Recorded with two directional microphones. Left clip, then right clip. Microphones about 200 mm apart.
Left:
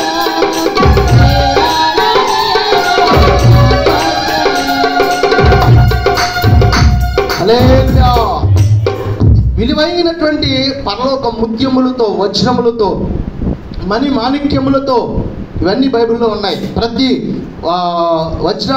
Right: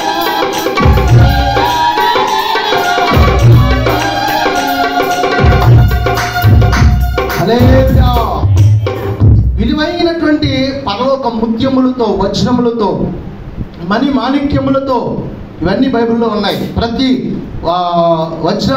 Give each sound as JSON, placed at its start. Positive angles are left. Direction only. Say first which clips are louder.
{"t": 0.1, "sound": "music", "louder": "even", "side_deg": 40}
{"t": 9.6, "sound": "a sound", "louder": "left 3 dB", "side_deg": 40}
{"t": 10.4, "sound": "a man's voice", "louder": "left 1 dB", "side_deg": 40}